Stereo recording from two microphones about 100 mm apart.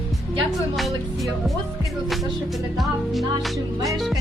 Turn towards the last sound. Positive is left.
turn(degrees=0)  # may be behind; listen again after turning